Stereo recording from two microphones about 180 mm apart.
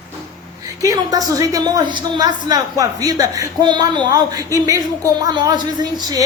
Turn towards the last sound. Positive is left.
turn(degrees=-20)  # may be behind; listen again after turning